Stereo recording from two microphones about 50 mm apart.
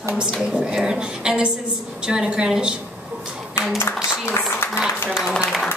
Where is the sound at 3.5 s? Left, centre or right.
Left.